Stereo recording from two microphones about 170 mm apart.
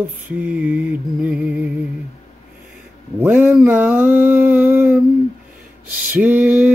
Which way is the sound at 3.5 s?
10° right (ahead or behind).